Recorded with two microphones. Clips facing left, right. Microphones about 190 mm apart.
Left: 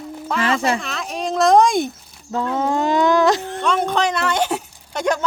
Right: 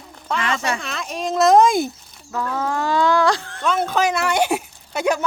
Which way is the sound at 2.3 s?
25° left (ahead or behind).